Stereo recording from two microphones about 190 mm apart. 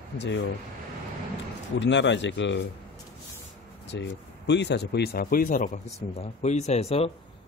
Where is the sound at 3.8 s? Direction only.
70° left (ahead or behind); by 7.1 s 35° left (ahead or behind).